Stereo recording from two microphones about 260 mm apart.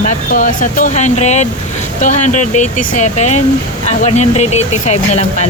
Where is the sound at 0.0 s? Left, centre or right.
Left.